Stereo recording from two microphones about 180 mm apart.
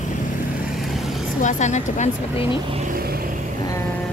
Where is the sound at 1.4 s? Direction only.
40° left (ahead or behind).